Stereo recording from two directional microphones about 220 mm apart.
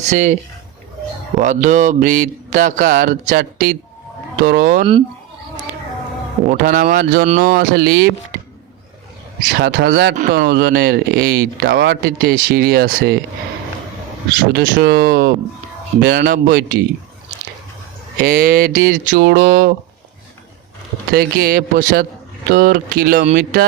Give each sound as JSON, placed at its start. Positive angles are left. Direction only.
{"t": 0.1, "sound": "speech", "side_deg": -35}
{"t": 1.4, "sound": "speech", "side_deg": -35}
{"t": 6.5, "sound": "speech", "side_deg": -40}
{"t": 9.4, "sound": "speech", "side_deg": -45}
{"t": 14.5, "sound": "speech", "side_deg": -45}
{"t": 18.2, "sound": "speech", "side_deg": -40}
{"t": 21.1, "sound": "speech", "side_deg": -45}